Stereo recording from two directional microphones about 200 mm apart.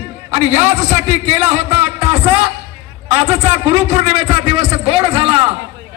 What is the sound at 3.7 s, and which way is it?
A man's voice, 30° right (ahead or behind).